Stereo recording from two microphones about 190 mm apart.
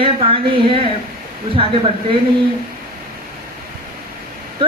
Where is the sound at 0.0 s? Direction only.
30° right (ahead or behind).